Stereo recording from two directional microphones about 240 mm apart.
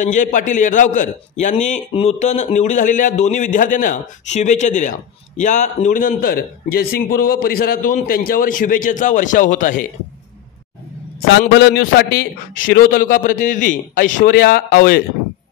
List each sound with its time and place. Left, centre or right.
0.0 s a man's voice: left
11.5 s a man's voice: left